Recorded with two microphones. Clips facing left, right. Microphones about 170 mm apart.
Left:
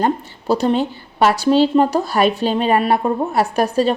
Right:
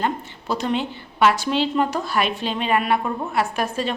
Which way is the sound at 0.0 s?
35° left (ahead or behind).